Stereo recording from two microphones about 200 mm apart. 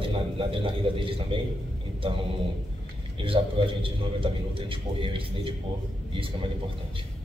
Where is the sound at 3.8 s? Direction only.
25° right (ahead or behind).